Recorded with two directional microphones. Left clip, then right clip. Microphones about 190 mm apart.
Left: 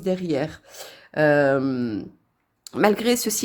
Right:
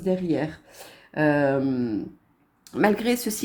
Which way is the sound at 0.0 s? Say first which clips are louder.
Left 1 dB; 40° left (ahead or behind).